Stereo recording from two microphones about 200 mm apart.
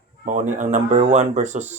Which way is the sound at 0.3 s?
40° right (ahead or behind).